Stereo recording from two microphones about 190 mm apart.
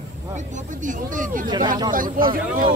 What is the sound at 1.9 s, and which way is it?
Speech, 45° right (ahead or behind).